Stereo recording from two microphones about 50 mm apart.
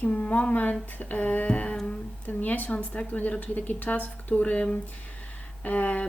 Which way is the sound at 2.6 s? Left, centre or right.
Left.